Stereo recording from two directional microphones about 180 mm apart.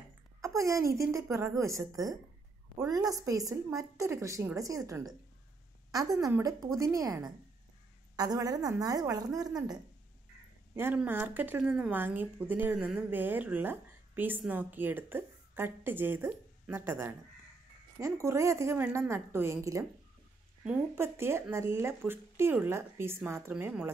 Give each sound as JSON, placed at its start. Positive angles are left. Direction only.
{"t": 0.4, "sound": "a woman's voice", "side_deg": -15}
{"t": 10.8, "sound": "speech", "side_deg": -10}